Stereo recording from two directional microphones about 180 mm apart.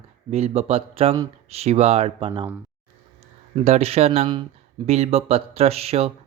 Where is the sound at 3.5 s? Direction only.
35° right (ahead or behind).